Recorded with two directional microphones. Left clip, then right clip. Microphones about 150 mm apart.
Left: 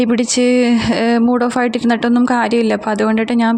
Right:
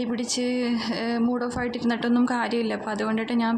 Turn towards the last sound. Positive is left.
turn(degrees=50)  # may be behind; listen again after turning